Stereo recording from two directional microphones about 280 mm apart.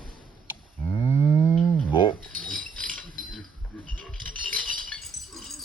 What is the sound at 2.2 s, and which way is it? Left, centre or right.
Pulleys, right.